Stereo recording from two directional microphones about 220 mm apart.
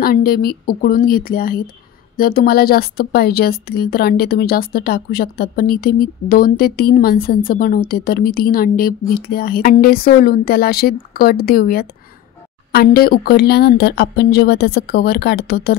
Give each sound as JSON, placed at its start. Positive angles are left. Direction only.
{"t": 0.0, "sound": "a woman's voice", "side_deg": 45}